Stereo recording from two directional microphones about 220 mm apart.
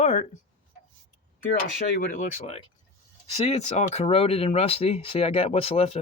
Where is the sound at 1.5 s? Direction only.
45° left (ahead or behind); by 6.0 s 30° left (ahead or behind).